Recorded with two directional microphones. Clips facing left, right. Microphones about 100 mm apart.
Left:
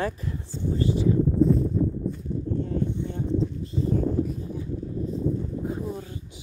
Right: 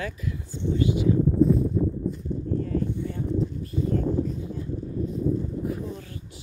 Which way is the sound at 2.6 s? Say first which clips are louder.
Even; 25° left (ahead or behind).